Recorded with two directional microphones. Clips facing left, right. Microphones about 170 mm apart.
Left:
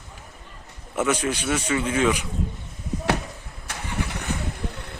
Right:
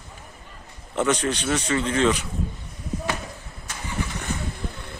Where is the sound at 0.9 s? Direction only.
10° left (ahead or behind).